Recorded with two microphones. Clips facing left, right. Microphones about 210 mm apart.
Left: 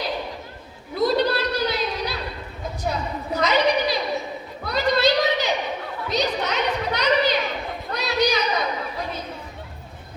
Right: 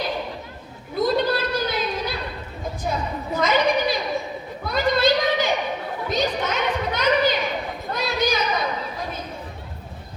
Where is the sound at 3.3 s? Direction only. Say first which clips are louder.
Even; 50° right (ahead or behind).